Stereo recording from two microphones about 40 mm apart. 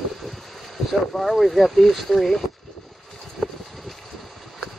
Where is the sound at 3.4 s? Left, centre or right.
Left.